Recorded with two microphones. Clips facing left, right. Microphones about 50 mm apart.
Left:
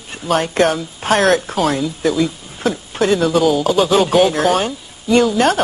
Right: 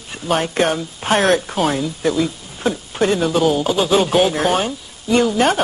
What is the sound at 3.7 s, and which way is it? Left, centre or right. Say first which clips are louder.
Speech: left 3 dB; centre.